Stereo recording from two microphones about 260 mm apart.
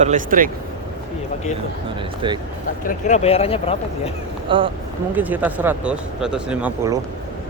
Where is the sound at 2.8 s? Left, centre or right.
Left.